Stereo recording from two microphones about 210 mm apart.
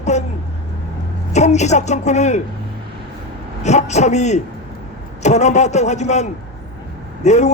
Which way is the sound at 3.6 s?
35° left (ahead or behind).